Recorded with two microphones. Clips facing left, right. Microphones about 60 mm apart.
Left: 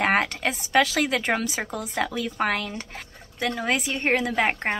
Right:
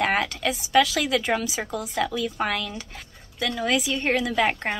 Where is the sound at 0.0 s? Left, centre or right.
Left.